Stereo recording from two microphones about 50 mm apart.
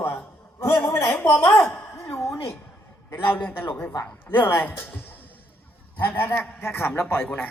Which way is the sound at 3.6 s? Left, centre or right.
Left.